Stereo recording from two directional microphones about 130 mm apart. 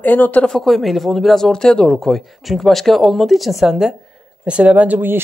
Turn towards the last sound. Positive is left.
turn(degrees=-15)  # may be behind; listen again after turning